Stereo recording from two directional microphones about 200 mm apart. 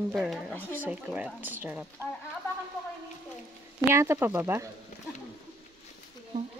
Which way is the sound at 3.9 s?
10° right (ahead or behind).